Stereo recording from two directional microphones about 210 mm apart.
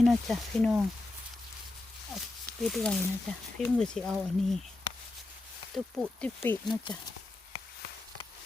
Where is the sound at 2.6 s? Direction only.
Centre (ahead or behind).